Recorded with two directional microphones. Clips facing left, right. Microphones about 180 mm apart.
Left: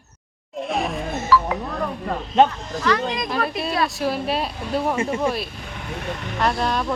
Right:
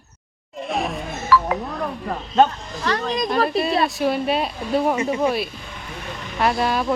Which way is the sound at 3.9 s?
Centre (ahead or behind).